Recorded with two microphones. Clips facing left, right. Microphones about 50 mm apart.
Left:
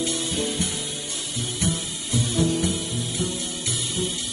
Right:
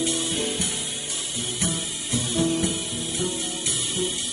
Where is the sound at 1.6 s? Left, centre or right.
Right.